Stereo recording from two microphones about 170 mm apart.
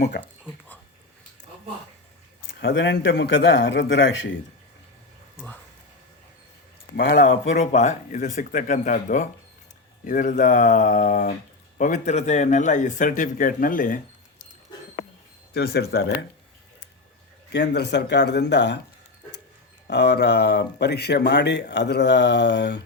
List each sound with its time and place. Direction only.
2.6 s speech: 90° left
6.9 s speech: 90° left
7.5 s speech: 45° left (ahead or behind)
15.5 s speech: 75° left (ahead or behind)
17.5 s speech: 80° left
19.9 s speech: 75° left (ahead or behind)